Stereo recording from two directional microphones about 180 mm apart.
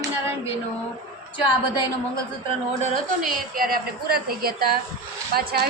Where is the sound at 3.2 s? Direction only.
50° right (ahead or behind).